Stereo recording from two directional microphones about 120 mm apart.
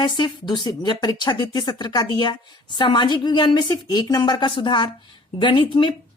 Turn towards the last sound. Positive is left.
turn(degrees=45)  # may be behind; listen again after turning